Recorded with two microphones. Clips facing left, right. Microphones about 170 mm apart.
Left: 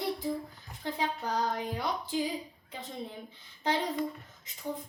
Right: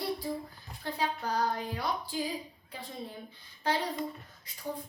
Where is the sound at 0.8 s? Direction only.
20° left (ahead or behind).